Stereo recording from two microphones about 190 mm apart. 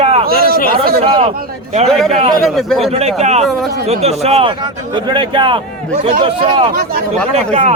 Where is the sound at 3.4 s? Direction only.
Centre (ahead or behind).